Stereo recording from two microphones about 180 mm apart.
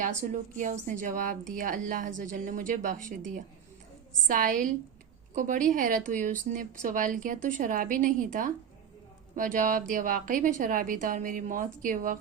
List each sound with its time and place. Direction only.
0.0 s speech: 45° right (ahead or behind)